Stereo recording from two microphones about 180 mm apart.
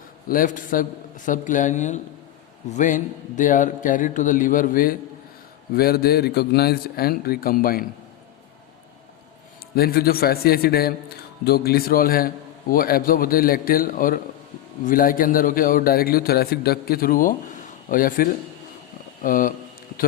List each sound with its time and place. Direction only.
0.3 s a man's voice: 50° left (ahead or behind)
9.7 s a man's voice: 60° left (ahead or behind)